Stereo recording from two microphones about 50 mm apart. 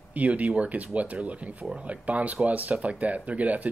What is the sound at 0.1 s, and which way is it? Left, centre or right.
Speech, right.